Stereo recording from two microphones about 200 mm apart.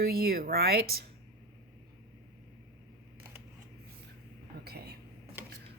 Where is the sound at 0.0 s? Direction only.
50° right (ahead or behind).